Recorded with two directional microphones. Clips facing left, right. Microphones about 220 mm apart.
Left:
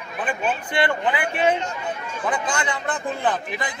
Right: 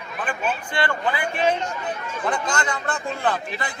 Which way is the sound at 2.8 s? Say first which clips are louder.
Left 1 dB; 15° left (ahead or behind).